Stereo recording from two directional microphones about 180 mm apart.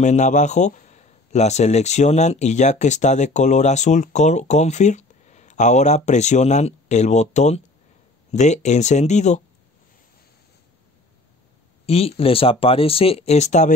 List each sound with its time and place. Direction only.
0.0 s a man's voice: 40° left (ahead or behind)
11.8 s a man's voice: 35° left (ahead or behind)